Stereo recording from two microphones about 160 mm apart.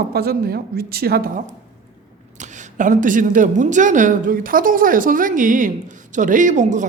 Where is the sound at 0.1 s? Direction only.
75° right (ahead or behind).